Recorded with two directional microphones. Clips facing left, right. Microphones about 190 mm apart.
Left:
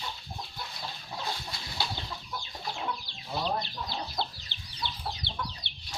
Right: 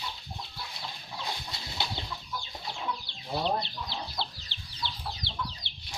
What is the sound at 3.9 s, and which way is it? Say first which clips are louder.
Chicken: left 2 dB; 50° left (ahead or behind).